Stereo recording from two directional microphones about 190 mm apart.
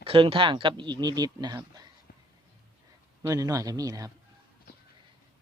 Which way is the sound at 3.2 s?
15° right (ahead or behind).